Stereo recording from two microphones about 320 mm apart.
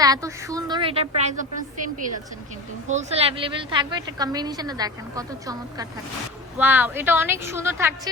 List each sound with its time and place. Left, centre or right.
0.0 s a woman's voice: centre
2.9 s a woman's voice: centre